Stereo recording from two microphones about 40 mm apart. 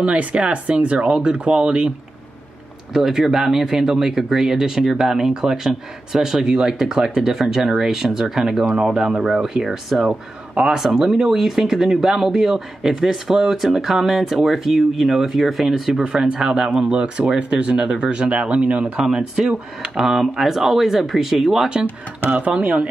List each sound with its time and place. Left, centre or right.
0.0 s speech: right
2.9 s speech: centre; by 18.9 s right
18.9 s speech: centre
22.6 s speech: right